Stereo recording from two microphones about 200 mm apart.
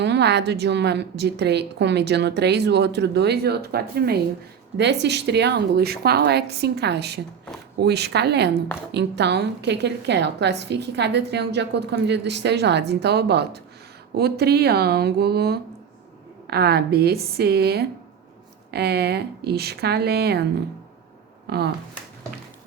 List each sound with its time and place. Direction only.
0.0 s a woman's voice: 60° right (ahead or behind)
21.5 s speech: 55° right (ahead or behind)